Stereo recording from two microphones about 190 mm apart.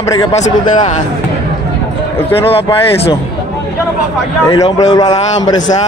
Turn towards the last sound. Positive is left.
turn(degrees=20)  # may be behind; listen again after turning